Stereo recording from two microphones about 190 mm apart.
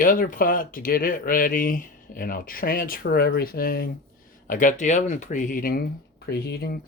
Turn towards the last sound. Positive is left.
turn(degrees=55)  # may be behind; listen again after turning